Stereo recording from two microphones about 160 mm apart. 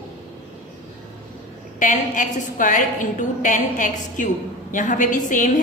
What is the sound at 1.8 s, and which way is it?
A woman's voice, 55° left (ahead or behind).